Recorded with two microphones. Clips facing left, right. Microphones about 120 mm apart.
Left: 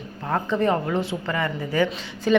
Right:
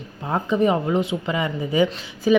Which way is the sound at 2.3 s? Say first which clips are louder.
Right 2 dB; 5° right (ahead or behind).